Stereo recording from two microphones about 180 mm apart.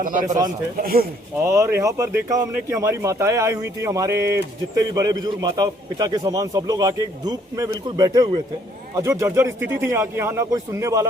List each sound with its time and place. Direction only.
0.0 s speech: 45° right (ahead or behind)
1.4 s a man's voice: 15° right (ahead or behind)